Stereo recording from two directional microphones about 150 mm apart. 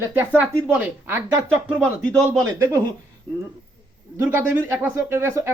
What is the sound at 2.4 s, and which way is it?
Speech, 20° right (ahead or behind).